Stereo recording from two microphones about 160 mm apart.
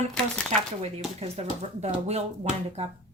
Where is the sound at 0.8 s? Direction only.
40° right (ahead or behind).